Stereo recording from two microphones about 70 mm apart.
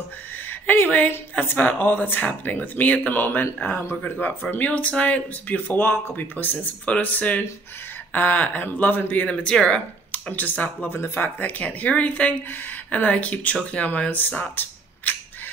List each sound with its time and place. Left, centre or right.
0.5 s speech: left
9.2 s speech: centre